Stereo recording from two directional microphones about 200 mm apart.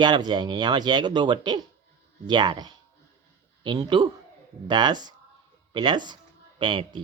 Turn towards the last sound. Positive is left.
turn(degrees=-25)  # may be behind; listen again after turning